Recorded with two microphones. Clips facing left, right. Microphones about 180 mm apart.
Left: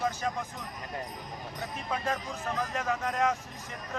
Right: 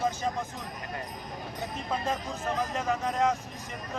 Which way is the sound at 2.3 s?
20° right (ahead or behind).